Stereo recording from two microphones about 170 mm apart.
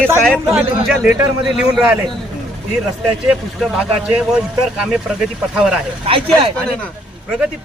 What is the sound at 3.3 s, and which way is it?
A man's voice, 5° right (ahead or behind).